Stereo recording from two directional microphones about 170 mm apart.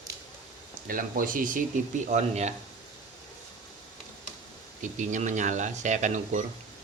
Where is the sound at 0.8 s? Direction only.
55° right (ahead or behind).